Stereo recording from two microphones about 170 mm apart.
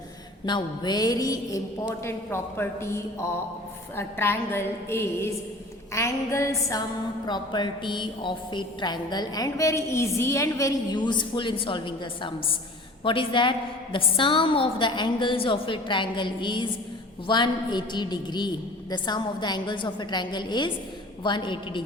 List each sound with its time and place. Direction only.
0.4 s a woman's voice: 25° left (ahead or behind)